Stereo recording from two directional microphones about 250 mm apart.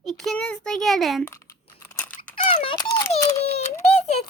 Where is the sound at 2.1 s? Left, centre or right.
Left.